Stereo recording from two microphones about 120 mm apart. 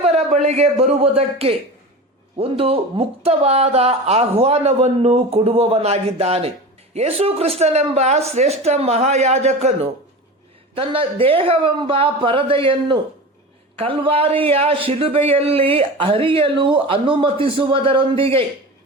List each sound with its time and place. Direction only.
0.0 s speech: 65° right (ahead or behind)
10.8 s speech: 50° right (ahead or behind)